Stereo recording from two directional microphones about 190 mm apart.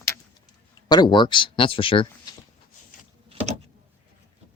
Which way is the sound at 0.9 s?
20° left (ahead or behind).